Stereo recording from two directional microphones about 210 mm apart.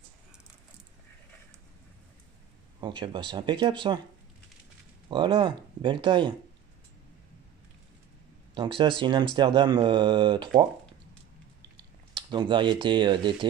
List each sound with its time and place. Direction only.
2.8 s speech: 25° right (ahead or behind)
5.1 s speech: 20° right (ahead or behind)
8.5 s speech: 25° right (ahead or behind)
11.7 s speech: 25° right (ahead or behind)